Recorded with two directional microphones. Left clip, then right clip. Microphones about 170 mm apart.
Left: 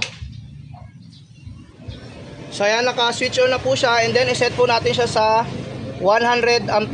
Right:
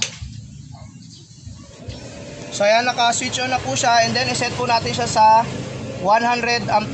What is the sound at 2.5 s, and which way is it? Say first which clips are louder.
Speech: right 2 dB; 75° left (ahead or behind).